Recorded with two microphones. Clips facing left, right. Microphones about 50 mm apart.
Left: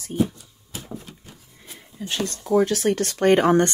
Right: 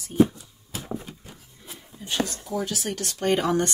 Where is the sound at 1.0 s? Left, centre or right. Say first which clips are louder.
Right 1 dB; centre.